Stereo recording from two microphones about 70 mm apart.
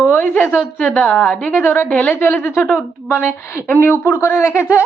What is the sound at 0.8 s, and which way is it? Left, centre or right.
Speech, centre.